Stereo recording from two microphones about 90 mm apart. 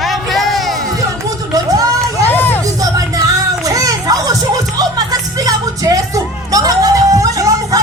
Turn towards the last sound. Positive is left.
turn(degrees=-40)  # may be behind; listen again after turning